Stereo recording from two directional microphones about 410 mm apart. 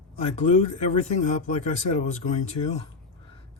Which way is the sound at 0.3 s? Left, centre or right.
Centre.